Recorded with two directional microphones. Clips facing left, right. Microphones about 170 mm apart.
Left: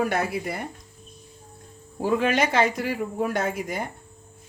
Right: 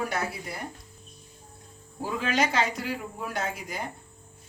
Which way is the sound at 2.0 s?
60° left (ahead or behind).